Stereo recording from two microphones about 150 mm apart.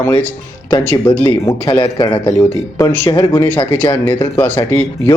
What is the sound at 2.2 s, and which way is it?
Speech, 20° left (ahead or behind).